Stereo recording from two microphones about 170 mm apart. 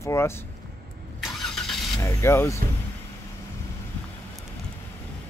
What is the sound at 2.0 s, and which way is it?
Speech, 15° left (ahead or behind).